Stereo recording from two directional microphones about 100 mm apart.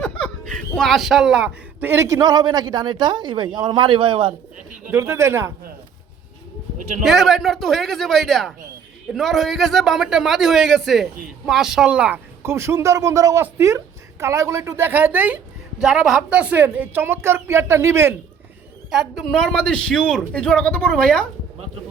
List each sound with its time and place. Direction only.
0.0 s a sound: 5° left (ahead or behind)
0.7 s a man's voice: 5° left (ahead or behind)
1.8 s a woman's voice: 25° right (ahead or behind); by 4.4 s 60° right (ahead or behind)
4.9 s a woman's voice: 25° right (ahead or behind)
7.0 s a man's voice: centre (ahead or behind)
12.4 s a woman's voice: 25° right (ahead or behind)
15.8 s a woman's voice: 5° right (ahead or behind); by 18.2 s 25° right (ahead or behind)
18.9 s a man's voice: centre (ahead or behind)